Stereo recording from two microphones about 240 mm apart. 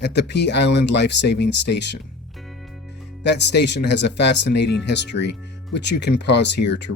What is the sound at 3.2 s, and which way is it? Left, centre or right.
Speech, left.